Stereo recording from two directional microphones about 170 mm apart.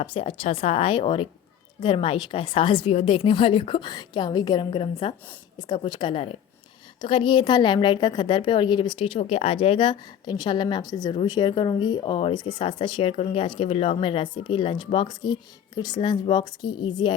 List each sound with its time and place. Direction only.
0.0 s a woman's voice: 35° left (ahead or behind)